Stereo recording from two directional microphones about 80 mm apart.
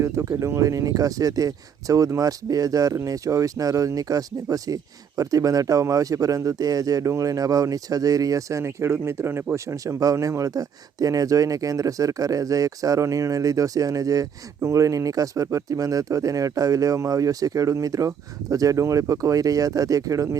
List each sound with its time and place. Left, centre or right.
0.0 s speech: right